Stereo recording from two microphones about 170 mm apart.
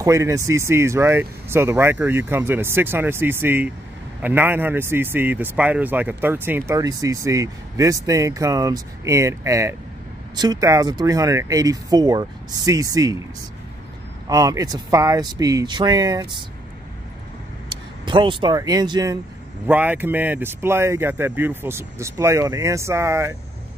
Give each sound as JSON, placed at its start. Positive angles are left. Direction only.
{"t": 0.0, "sound": "speech", "side_deg": -15}
{"t": 14.3, "sound": "speech", "side_deg": -20}
{"t": 17.6, "sound": "speech", "side_deg": -30}
{"t": 19.7, "sound": "speech", "side_deg": -10}